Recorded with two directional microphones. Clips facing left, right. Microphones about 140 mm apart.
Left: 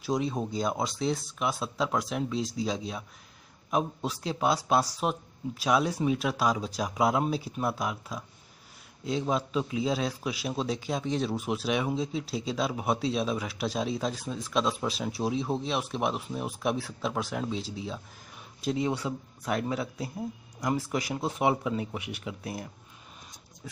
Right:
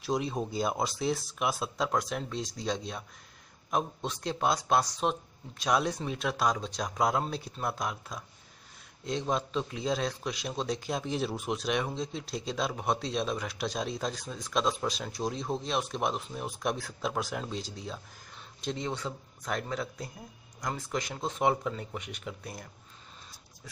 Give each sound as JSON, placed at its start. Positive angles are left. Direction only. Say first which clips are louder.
{"t": 0.0, "sound": "a man's voice", "louder": "left 2 dB", "side_deg": 0}